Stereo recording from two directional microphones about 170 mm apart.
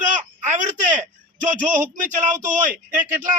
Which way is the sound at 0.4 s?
45° right (ahead or behind).